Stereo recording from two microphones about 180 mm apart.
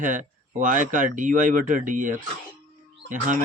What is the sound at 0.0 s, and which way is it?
Speech, 45° right (ahead or behind).